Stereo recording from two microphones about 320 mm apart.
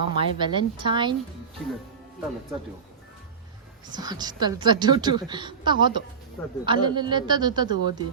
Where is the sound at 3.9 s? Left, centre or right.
Centre.